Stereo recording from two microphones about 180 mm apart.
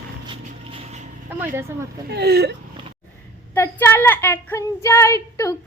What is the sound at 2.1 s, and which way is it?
Speech, 65° right (ahead or behind).